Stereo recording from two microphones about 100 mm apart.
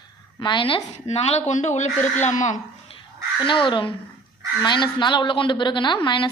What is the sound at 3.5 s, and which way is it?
A woman's voice, 55° left (ahead or behind).